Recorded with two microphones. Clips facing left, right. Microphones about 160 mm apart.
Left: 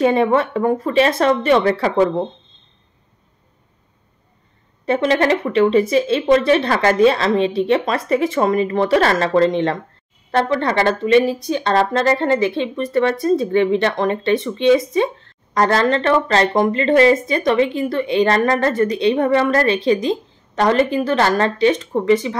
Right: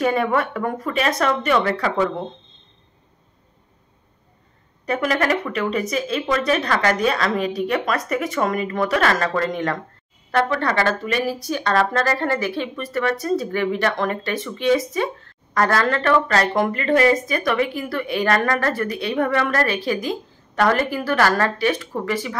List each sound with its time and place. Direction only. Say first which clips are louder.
0.0 s a woman's voice: left 5 dB; 25° left (ahead or behind)
4.8 s a woman's voice: left 5 dB; 25° left (ahead or behind)